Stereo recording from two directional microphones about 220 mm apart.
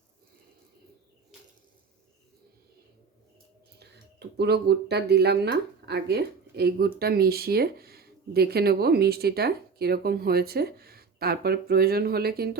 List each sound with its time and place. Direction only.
4.4 s speech: 50° right (ahead or behind)